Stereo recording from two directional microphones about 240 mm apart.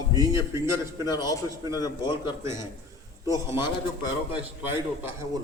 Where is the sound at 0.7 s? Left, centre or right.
Centre.